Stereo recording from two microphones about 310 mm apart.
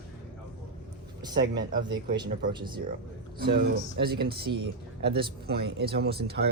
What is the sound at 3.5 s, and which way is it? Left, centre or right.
Speech, right.